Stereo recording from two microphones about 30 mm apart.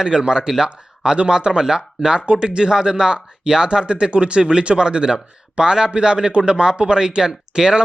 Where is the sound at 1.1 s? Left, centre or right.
Right; by 2.1 s centre.